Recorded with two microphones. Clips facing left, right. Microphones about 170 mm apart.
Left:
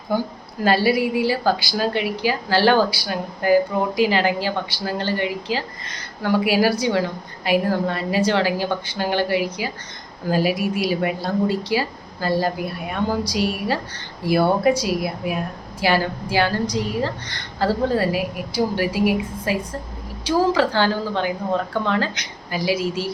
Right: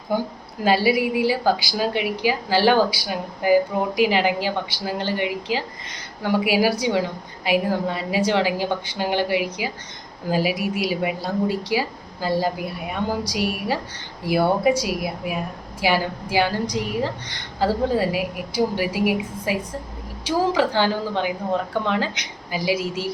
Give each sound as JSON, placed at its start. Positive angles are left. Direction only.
{"t": 0.6, "sound": "a woman's voice", "side_deg": -15}